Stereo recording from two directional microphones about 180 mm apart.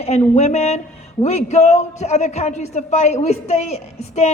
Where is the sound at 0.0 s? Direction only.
35° left (ahead or behind).